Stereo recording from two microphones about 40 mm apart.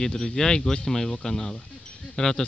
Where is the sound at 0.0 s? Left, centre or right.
Centre.